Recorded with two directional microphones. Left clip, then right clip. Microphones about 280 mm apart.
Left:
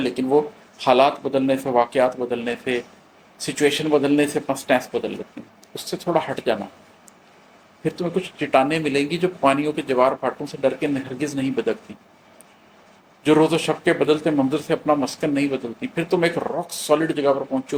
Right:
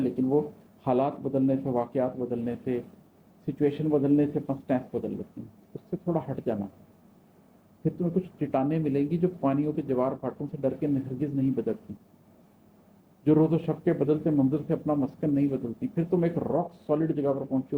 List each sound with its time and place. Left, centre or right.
0.3 s speech: centre
0.8 s speech: centre
7.9 s speech: centre
13.2 s speech: centre